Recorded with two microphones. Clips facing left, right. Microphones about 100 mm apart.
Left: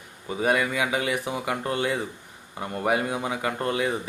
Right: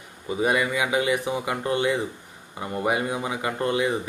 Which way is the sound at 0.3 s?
10° right (ahead or behind).